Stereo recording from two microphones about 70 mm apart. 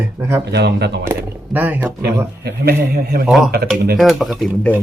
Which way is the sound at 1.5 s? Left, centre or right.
Right.